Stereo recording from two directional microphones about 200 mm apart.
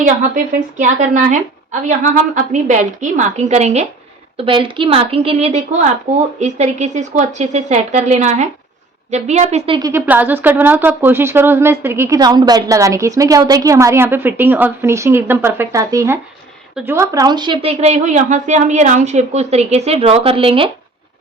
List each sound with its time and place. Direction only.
0.0 s a woman's voice: 40° right (ahead or behind)
9.9 s a woman's voice: 10° right (ahead or behind); by 20.7 s 25° right (ahead or behind)